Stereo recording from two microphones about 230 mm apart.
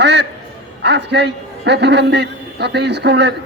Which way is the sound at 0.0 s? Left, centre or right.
Right.